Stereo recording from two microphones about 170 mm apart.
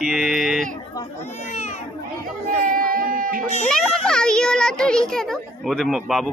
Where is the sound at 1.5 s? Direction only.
45° left (ahead or behind).